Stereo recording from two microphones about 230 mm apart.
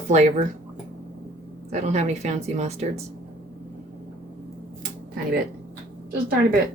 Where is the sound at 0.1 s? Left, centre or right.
Right.